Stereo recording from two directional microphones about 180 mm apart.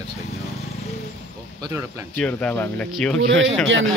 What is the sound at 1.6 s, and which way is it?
Speech, 15° right (ahead or behind).